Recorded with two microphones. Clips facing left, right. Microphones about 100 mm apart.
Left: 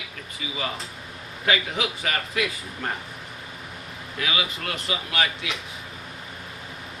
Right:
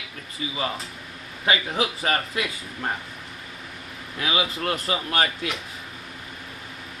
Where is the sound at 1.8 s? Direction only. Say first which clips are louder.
Right 3 dB; 35° right (ahead or behind).